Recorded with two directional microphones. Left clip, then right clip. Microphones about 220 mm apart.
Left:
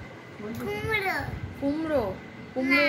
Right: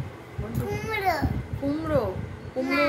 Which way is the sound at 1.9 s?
15° left (ahead or behind).